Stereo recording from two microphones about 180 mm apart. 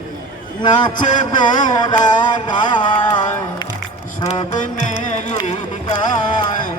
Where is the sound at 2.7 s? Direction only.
25° left (ahead or behind).